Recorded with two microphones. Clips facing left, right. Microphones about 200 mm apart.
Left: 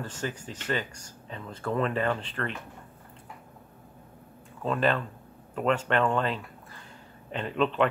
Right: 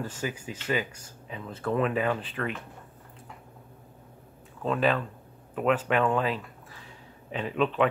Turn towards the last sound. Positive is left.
turn(degrees=-5)  # may be behind; listen again after turning